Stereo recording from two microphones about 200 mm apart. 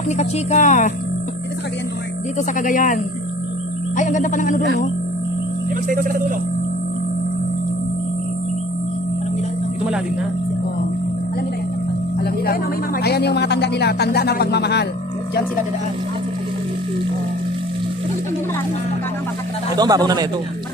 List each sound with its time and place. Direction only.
0.2 s speech: 35° left (ahead or behind)
2.6 s speech: 40° left (ahead or behind)
5.7 s speech: 45° right (ahead or behind)
13.0 s speech: 55° left (ahead or behind)
19.8 s a man's voice: 20° right (ahead or behind)